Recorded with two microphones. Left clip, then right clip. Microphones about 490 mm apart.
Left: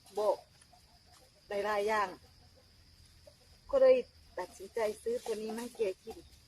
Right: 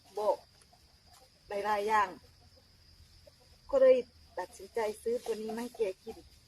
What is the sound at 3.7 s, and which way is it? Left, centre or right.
A woman's voice, right.